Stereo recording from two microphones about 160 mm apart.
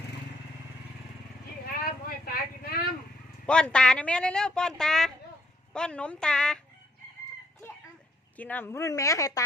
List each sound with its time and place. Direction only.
1.6 s a sound: 65° left (ahead or behind)
3.4 s speech: 5° left (ahead or behind)
8.4 s speech: 10° left (ahead or behind)